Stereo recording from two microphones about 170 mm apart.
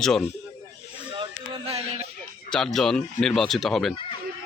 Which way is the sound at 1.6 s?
35° right (ahead or behind).